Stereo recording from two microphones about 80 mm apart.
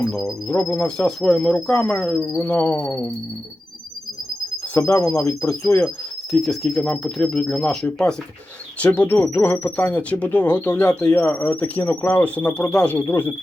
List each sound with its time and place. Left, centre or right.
0.0 s speech: centre
2.4 s speech: centre
4.8 s speech: left
5.1 s speech: centre
6.3 s speech: centre
8.8 s speech: left